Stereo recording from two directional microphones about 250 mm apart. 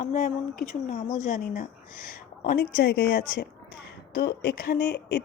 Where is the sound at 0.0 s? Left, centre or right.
Left.